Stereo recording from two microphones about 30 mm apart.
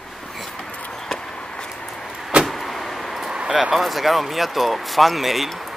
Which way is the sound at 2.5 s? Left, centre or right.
Centre.